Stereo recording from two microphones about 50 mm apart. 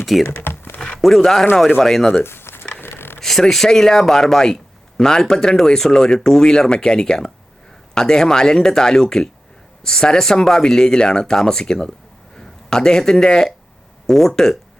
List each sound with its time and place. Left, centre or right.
0.0 s speech: centre
0.3 s computer keyboard: left
0.8 s speech: centre
2.2 s a sound: left
2.8 s mechanisms: left
3.2 s a sound: centre
3.5 s speech: centre